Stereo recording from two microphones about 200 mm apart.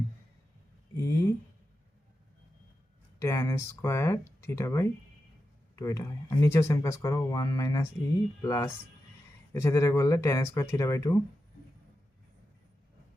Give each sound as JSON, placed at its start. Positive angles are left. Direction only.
{"t": 0.9, "sound": "speech", "side_deg": 15}
{"t": 3.2, "sound": "speech", "side_deg": 15}